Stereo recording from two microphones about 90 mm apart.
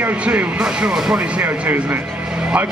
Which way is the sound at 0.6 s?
5° right (ahead or behind).